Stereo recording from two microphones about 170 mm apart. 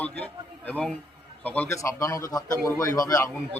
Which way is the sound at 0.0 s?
10° left (ahead or behind).